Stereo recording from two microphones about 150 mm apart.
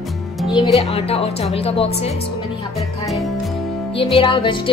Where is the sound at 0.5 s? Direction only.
40° left (ahead or behind).